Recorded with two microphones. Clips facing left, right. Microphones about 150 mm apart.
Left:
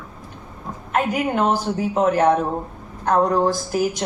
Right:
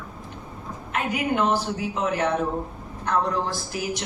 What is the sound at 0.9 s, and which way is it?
A woman's voice, 45° left (ahead or behind).